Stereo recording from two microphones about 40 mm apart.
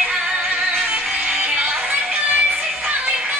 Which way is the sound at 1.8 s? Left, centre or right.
Right.